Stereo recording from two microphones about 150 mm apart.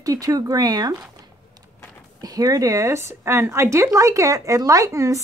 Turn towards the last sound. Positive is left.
turn(degrees=-20)  # may be behind; listen again after turning